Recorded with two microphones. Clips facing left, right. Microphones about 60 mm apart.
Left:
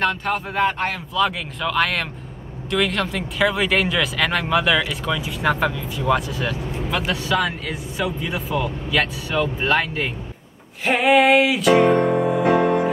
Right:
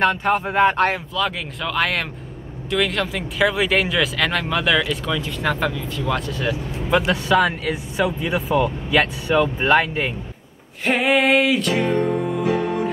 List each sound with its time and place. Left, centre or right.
0.0 s speech: centre
1.1 s speech: centre
6.9 s speech: centre
10.9 s speech: centre
12.0 s music: left